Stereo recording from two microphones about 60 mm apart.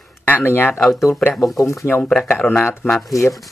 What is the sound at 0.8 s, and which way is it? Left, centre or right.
Speech, centre.